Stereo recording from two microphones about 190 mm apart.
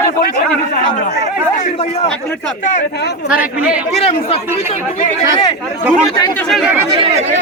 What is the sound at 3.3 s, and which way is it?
Speech, 5° right (ahead or behind).